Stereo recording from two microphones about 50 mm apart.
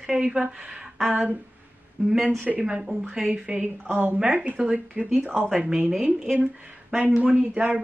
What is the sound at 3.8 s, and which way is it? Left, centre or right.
Speech, right.